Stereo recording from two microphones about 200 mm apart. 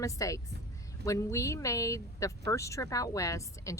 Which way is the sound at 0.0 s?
15° left (ahead or behind).